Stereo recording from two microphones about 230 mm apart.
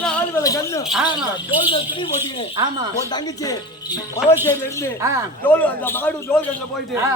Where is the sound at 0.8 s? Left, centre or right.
Centre.